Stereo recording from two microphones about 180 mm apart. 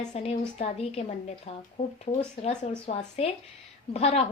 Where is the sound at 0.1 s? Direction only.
35° left (ahead or behind).